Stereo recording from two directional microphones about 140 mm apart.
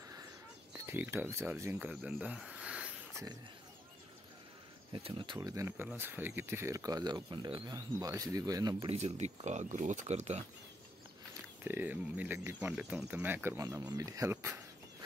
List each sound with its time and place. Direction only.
0.7 s speech: 15° right (ahead or behind)
4.9 s speech: 35° right (ahead or behind)
5.5 s speech: 20° right (ahead or behind)
8.7 s speech: 50° right (ahead or behind)
11.6 s speech: 15° right (ahead or behind)